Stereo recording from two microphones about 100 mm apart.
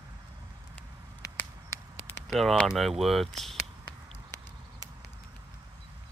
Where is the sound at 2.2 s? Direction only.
Centre (ahead or behind).